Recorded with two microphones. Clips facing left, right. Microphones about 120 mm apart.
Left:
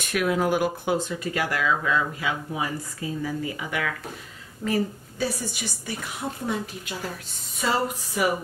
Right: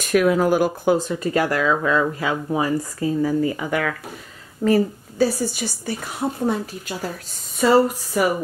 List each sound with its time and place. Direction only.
0.1 s speech: 45° right (ahead or behind)